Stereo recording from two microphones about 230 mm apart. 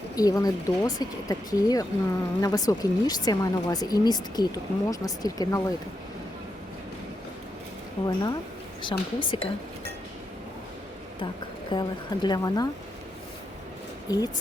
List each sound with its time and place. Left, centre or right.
0.2 s speech: centre
8.0 s speech: centre
11.7 s speech: centre
14.1 s speech: centre